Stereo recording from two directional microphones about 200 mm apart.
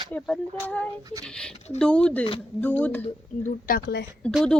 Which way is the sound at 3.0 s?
40° left (ahead or behind).